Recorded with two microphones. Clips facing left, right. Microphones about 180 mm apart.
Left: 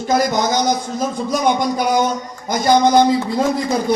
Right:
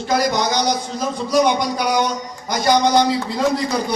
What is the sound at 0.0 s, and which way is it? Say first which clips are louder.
A man's voice: left 2 dB; 50° left (ahead or behind).